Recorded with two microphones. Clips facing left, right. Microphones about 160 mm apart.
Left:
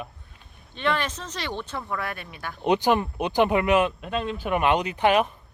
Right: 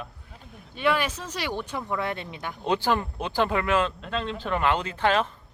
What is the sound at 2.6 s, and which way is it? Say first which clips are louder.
Speech: left 4 dB; 20° left (ahead or behind).